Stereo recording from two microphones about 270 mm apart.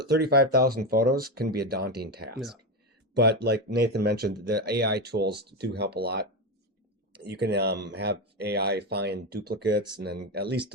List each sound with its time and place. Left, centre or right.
0.0 s speech: right